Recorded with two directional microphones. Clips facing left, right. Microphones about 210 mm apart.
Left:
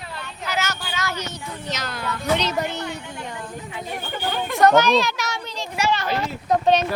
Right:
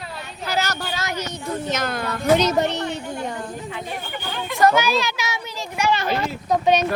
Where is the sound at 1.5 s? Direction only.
50° right (ahead or behind).